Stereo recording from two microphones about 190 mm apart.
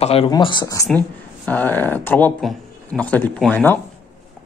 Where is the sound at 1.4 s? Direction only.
10° left (ahead or behind).